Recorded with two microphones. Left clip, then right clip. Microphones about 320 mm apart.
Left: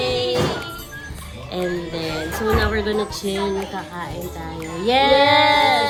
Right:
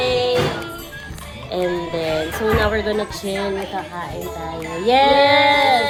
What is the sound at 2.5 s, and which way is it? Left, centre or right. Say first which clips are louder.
Speech: right 2 dB; centre.